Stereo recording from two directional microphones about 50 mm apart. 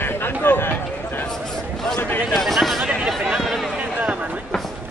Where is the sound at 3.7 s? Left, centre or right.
Right.